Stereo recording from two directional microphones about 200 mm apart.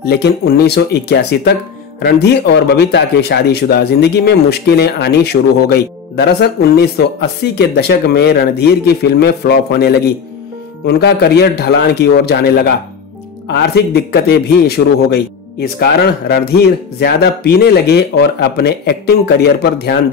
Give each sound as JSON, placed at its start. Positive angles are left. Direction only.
{"t": 0.0, "sound": "speech", "side_deg": 50}